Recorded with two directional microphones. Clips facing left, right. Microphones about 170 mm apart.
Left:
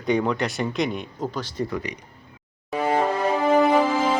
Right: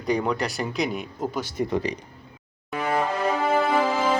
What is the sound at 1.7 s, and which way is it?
Speech, 30° right (ahead or behind).